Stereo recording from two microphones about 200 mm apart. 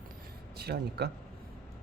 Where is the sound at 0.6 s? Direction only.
55° right (ahead or behind).